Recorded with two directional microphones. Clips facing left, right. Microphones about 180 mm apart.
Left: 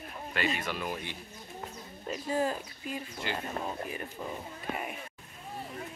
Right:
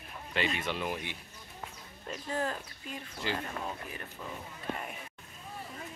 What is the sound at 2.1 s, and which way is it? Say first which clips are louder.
Speech: left 4 dB; 10° left (ahead or behind).